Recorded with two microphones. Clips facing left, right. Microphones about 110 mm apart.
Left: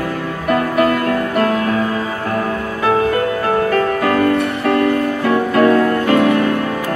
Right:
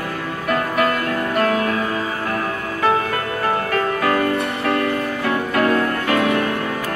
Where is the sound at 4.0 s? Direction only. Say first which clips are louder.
Left 2 dB; 35° left (ahead or behind).